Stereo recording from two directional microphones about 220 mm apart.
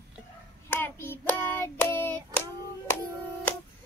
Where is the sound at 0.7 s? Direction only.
10° left (ahead or behind).